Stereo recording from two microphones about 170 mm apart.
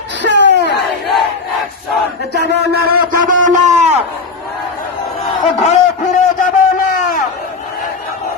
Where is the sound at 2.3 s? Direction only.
75° right (ahead or behind); by 3.9 s 45° right (ahead or behind).